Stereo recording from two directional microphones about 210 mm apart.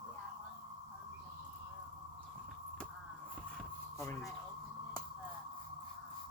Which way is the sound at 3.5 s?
10° left (ahead or behind).